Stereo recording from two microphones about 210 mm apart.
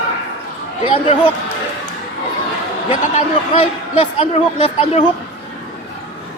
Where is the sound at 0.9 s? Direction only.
25° left (ahead or behind).